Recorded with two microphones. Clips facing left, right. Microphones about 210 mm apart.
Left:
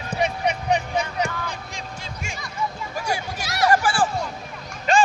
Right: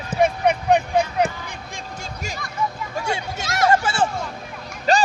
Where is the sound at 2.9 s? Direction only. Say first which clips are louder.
Right 1 dB; 25° right (ahead or behind).